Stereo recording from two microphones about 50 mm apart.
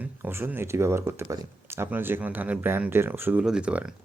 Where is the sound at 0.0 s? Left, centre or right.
Right.